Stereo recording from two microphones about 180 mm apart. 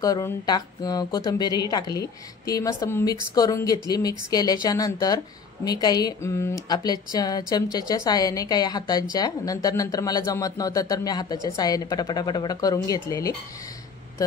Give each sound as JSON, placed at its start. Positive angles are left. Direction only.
{"t": 0.0, "sound": "speech", "side_deg": 20}